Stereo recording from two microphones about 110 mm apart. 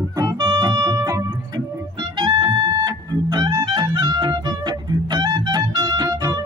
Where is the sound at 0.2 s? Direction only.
35° right (ahead or behind).